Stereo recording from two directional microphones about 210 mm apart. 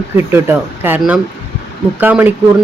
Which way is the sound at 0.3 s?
10° right (ahead or behind).